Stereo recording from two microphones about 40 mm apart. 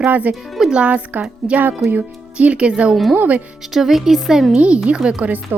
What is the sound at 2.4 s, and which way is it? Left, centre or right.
Speech, right.